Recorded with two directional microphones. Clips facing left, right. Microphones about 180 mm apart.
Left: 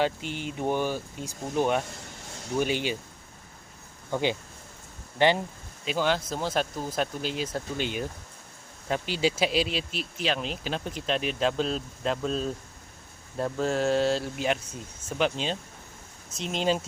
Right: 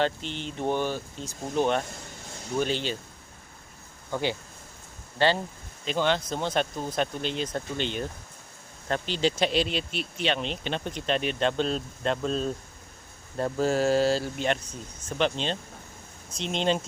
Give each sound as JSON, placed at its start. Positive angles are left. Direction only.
{"t": 0.0, "sound": "speech", "side_deg": 10}
{"t": 4.1, "sound": "speech", "side_deg": 20}
{"t": 5.8, "sound": "speech", "side_deg": 5}